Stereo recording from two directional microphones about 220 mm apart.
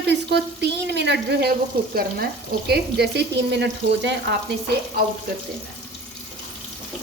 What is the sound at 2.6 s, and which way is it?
A woman's voice, 50° right (ahead or behind).